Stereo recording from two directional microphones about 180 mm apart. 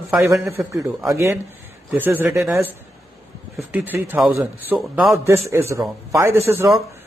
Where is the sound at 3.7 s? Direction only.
10° right (ahead or behind).